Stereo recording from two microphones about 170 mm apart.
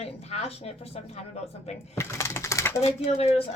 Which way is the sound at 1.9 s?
15° left (ahead or behind).